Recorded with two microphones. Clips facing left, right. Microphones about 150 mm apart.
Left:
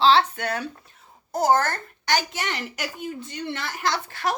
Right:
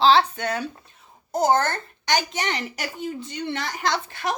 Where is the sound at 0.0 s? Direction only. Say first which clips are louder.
Right 1 dB; 15° right (ahead or behind).